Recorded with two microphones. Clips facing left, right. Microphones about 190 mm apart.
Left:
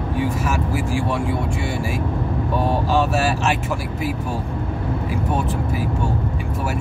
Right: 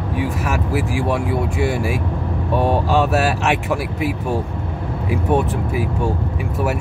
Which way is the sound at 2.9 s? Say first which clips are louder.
Right 1 dB; 65° right (ahead or behind).